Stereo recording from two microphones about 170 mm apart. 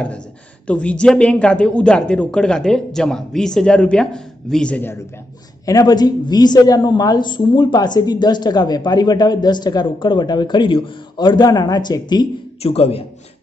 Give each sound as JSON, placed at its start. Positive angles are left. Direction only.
{"t": 0.7, "sound": "a woman's voice", "side_deg": 5}
{"t": 5.7, "sound": "a woman's voice", "side_deg": 20}
{"t": 12.6, "sound": "a man's voice", "side_deg": 35}